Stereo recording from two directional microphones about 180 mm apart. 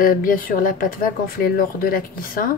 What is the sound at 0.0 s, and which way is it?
Speech, 50° left (ahead or behind).